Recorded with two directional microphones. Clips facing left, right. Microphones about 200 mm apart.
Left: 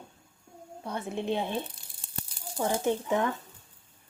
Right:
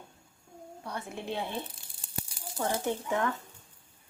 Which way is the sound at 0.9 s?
20° left (ahead or behind).